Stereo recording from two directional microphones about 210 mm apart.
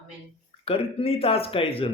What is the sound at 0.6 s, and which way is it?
A man's voice, 25° left (ahead or behind).